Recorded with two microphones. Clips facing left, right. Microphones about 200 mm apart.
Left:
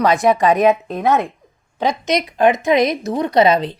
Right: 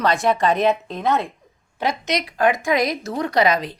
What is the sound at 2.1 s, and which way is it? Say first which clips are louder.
Speech: left 5 dB; 20° left (ahead or behind).